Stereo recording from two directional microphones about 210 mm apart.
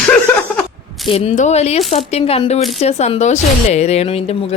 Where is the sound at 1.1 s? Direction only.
30° left (ahead or behind).